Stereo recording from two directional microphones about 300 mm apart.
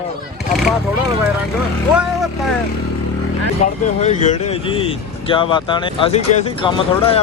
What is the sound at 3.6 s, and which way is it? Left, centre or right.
Speech, left.